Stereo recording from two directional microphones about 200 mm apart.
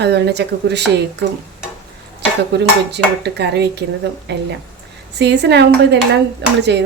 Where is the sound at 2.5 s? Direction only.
55° right (ahead or behind).